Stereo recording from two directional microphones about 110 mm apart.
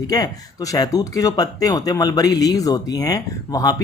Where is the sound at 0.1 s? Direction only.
30° left (ahead or behind).